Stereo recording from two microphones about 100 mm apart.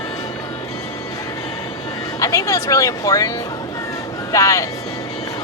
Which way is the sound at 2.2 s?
35° left (ahead or behind).